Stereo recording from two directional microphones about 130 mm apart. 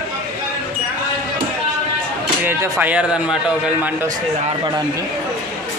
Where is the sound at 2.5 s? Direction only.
15° right (ahead or behind).